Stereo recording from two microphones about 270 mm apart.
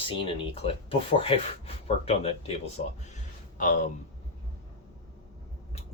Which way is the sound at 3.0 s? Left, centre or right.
Left.